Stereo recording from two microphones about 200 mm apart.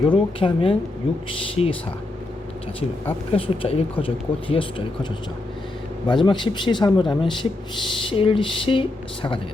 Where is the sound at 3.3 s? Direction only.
30° left (ahead or behind).